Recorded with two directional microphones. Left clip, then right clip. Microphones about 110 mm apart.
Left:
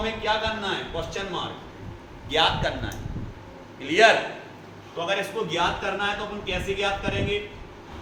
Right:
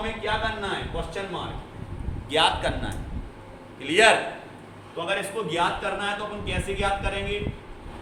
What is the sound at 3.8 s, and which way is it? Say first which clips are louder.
Speech: left 1 dB; 90° right.